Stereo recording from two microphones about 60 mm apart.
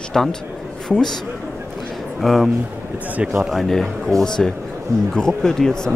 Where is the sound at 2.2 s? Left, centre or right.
Centre.